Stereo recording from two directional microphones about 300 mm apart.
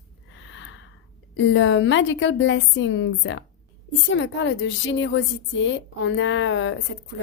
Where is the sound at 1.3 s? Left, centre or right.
Left.